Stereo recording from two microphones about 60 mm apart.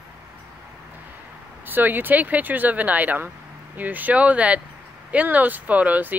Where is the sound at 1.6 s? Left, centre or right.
Right.